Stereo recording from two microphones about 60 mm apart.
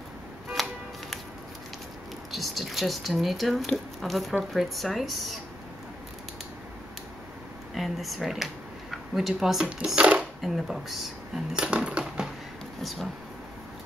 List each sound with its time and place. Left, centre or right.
0.6 s music: centre
2.3 s speech: centre
7.7 s speech: centre
9.9 s dishes: centre
10.4 s speech: centre
11.5 s coin: centre
12.8 s speech: centre